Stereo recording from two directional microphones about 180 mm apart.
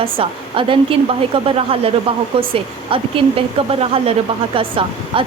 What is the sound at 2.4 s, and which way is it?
Speech, 30° right (ahead or behind).